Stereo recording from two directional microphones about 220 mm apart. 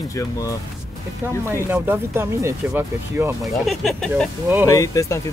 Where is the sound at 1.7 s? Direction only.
10° right (ahead or behind).